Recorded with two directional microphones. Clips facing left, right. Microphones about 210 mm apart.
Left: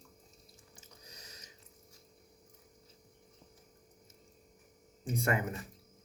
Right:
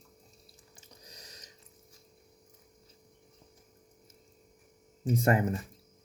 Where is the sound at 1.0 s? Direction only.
35° right (ahead or behind).